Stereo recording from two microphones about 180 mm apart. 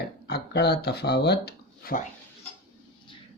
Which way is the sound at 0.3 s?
65° left (ahead or behind).